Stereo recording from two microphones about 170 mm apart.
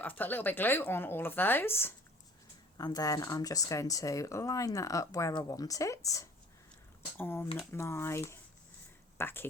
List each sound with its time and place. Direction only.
0.0 s speech: 10° left (ahead or behind)